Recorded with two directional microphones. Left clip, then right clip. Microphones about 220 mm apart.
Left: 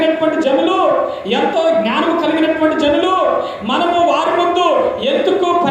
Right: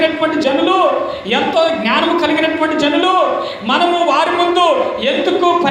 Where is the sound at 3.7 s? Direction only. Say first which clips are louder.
Right 1 dB; 20° right (ahead or behind).